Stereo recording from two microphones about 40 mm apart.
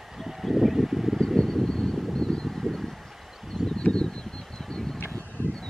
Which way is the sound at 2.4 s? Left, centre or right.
Centre.